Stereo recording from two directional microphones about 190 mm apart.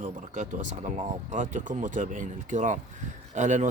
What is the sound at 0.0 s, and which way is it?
Speech, 40° right (ahead or behind).